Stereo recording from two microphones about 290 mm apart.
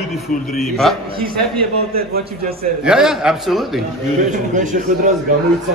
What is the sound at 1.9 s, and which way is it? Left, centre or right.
Speech, right.